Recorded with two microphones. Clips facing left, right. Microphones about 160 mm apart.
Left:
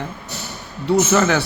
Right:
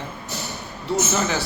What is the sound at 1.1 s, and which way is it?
Speech, 65° left (ahead or behind).